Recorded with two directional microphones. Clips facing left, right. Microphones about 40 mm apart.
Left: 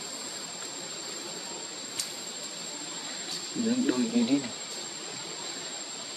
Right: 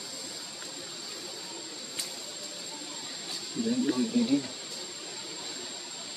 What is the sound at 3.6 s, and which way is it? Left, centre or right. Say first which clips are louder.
Speech: left 1 dB; centre.